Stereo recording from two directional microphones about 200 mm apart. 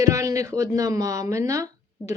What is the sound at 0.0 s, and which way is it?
Speech, 15° right (ahead or behind).